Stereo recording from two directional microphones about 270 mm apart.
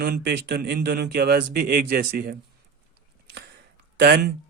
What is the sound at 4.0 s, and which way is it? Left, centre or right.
Speech, right.